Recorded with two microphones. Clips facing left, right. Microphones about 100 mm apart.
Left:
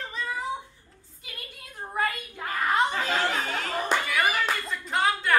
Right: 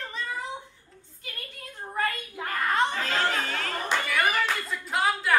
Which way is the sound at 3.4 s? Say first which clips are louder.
Left 1 dB; 20° left (ahead or behind).